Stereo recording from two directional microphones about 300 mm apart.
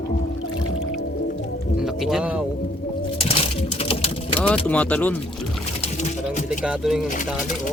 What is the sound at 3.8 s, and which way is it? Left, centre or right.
Sewing machine, centre.